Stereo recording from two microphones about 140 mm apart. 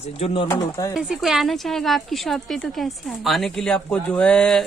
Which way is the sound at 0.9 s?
5° right (ahead or behind).